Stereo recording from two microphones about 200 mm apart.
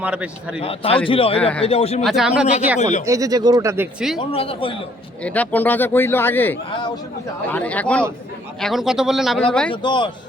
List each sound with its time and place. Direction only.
0.0 s speech: 5° right (ahead or behind)
0.6 s a man's voice: 30° left (ahead or behind)
2.0 s speech: centre (ahead or behind)
2.7 s speech: 35° left (ahead or behind)
3.1 s speech: 15° right (ahead or behind)
4.3 s a man's voice: 30° left (ahead or behind)
5.2 s a man's voice: 5° left (ahead or behind)
9.8 s a man's voice: 25° left (ahead or behind)